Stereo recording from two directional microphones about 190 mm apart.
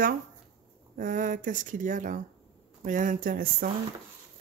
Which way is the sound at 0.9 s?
45° right (ahead or behind).